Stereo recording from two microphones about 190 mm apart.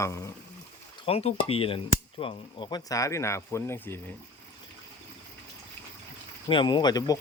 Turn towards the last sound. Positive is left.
turn(degrees=20)  # may be behind; listen again after turning